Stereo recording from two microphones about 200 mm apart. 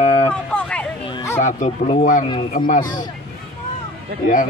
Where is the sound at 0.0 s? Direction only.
30° left (ahead or behind).